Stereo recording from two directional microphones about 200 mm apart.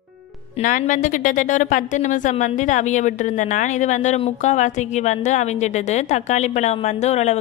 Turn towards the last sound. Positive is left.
turn(degrees=35)  # may be behind; listen again after turning